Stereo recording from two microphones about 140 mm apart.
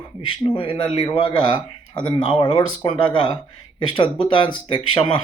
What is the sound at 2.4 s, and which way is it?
Speech, 35° left (ahead or behind).